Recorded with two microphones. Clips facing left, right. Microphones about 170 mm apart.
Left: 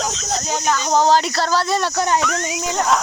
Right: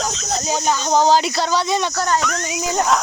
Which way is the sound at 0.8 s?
Centre (ahead or behind).